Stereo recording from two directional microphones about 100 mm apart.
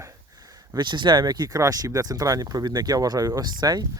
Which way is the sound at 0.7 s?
50° right (ahead or behind).